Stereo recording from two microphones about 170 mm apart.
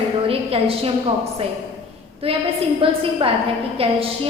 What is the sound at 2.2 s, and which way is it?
A woman's voice, 35° right (ahead or behind).